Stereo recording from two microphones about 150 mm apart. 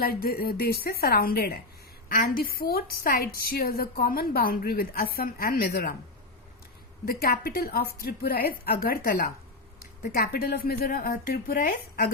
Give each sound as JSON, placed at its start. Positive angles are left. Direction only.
{"t": 0.0, "sound": "a woman's voice", "side_deg": 90}
{"t": 7.0, "sound": "a woman's voice", "side_deg": 90}